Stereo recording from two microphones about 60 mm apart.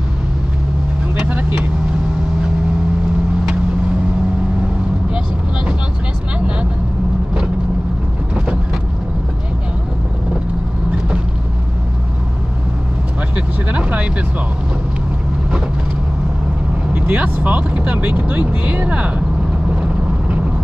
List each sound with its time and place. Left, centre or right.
13.7 s vehicle: right
16.9 s vehicle: right